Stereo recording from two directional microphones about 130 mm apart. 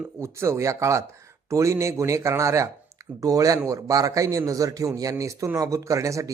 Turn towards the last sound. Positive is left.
turn(degrees=-25)  # may be behind; listen again after turning